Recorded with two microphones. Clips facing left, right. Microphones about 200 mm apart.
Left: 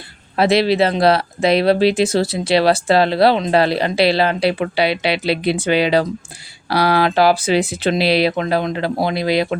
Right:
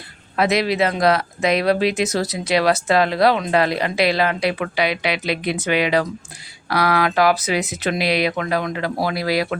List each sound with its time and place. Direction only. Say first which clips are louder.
0.3 s speech: left 4 dB; 30° left (ahead or behind)